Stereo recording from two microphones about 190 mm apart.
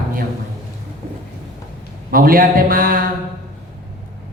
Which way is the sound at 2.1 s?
50° right (ahead or behind).